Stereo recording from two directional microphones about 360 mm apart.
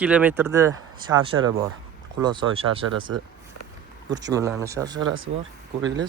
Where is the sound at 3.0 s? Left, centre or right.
Right.